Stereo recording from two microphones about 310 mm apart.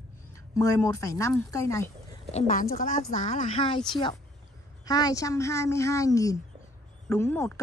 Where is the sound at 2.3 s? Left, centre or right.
Left.